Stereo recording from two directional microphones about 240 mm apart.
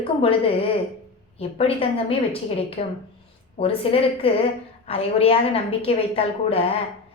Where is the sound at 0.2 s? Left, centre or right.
Left.